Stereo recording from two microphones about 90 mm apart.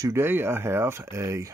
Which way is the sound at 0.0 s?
30° right (ahead or behind).